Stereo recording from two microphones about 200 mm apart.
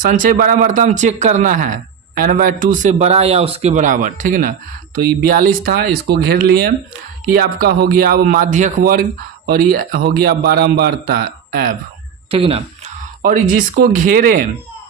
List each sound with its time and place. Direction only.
0.0 s a man's voice: 40° right (ahead or behind)
12.3 s speech: 30° right (ahead or behind)
13.2 s a man's voice: 45° right (ahead or behind)